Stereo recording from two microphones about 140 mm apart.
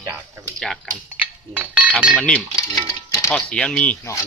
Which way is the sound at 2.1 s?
5° left (ahead or behind).